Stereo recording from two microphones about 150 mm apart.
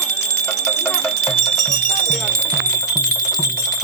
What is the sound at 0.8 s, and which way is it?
Music, 15° left (ahead or behind).